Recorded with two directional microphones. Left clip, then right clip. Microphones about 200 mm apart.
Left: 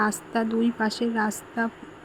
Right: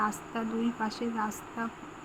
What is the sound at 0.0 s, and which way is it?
Speech, 30° left (ahead or behind).